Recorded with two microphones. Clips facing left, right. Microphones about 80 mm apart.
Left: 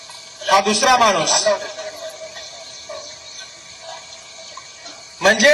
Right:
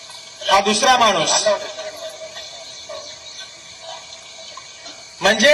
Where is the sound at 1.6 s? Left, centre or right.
Left.